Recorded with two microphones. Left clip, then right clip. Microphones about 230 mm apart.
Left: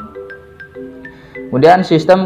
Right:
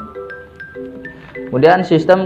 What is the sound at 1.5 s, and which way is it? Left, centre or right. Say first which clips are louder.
Speech: left 2 dB; left.